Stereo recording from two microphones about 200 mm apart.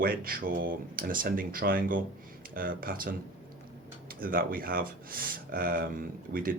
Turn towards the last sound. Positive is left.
turn(degrees=-45)  # may be behind; listen again after turning